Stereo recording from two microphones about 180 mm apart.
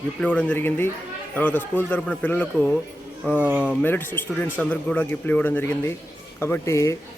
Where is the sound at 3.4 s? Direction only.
10° right (ahead or behind).